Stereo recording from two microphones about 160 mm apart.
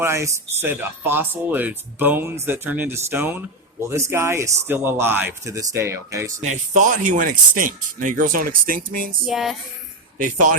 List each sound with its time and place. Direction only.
0.0 s speech: 15° right (ahead or behind)
6.4 s speech: 50° right (ahead or behind)
9.2 s a sound: centre (ahead or behind)
10.2 s speech: 55° right (ahead or behind)